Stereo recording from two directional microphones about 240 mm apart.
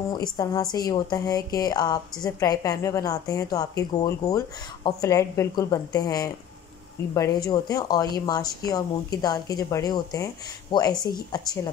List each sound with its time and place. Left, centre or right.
0.1 s speech: centre